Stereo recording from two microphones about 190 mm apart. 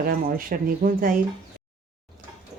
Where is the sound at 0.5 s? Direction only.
45° right (ahead or behind).